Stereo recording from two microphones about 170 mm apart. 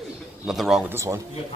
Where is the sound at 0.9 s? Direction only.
15° right (ahead or behind).